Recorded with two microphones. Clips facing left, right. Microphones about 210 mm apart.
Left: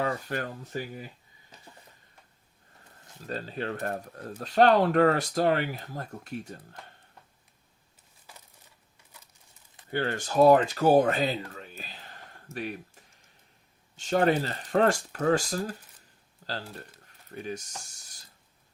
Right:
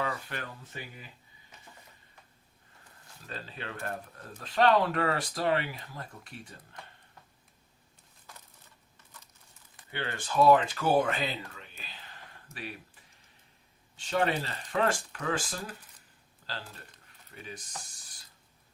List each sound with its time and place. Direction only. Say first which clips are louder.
0.0 s speech: left 5 dB; 35° left (ahead or behind)
3.2 s speech: left 8 dB; 40° left (ahead or behind)
9.9 s speech: left 5 dB; 40° left (ahead or behind)
16.4 s a sound: left 6 dB; 40° left (ahead or behind)
17.3 s speech: left 9 dB; 45° left (ahead or behind)